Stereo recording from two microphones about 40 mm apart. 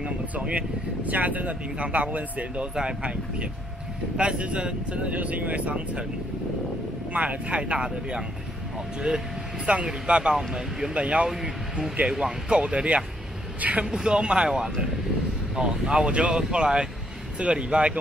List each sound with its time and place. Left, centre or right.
0.0 s speech: right
2.7 s speech: centre
3.0 s speech: right
7.1 s speech: right; by 11.0 s centre
11.0 s speech: right
11.2 s speech: centre
12.5 s speech: right
13.8 s speech: centre